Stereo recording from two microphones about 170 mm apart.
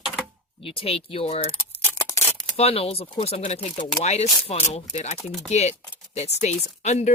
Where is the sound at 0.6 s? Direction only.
35° left (ahead or behind).